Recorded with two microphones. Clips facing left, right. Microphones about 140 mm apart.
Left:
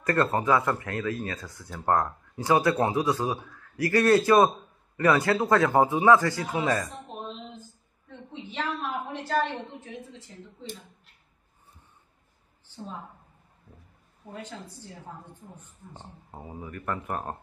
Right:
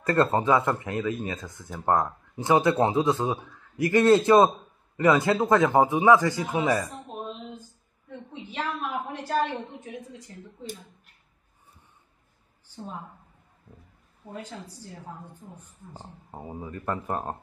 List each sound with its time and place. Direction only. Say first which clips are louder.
0.0 s speech: right 2 dB; 25° right (ahead or behind)
8.5 s a sound: even; 10° right (ahead or behind)
9.4 s speech: right 1 dB; 15° right (ahead or behind)
14.2 s speech: right 1 dB; 10° right (ahead or behind)
16.4 s speech: right 2 dB; 25° right (ahead or behind)